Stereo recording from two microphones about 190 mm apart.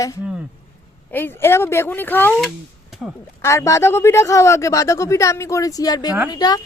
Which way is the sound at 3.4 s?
15° left (ahead or behind).